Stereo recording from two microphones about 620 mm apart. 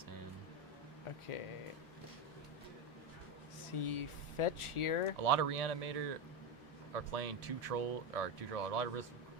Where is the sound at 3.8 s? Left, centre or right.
Left.